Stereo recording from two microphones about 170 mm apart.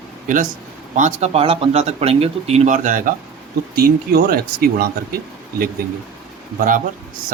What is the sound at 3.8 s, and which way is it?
Speech, 65° right (ahead or behind).